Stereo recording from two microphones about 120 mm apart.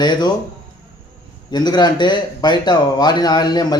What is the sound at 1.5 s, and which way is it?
A man's voice, 35° left (ahead or behind).